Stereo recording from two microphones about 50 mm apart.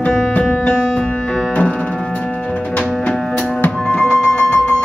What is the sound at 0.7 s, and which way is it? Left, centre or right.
Music, left.